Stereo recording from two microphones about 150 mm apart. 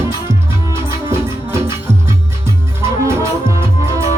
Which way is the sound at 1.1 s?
20° right (ahead or behind).